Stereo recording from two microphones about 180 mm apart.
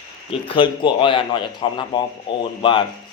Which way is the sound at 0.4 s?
25° left (ahead or behind).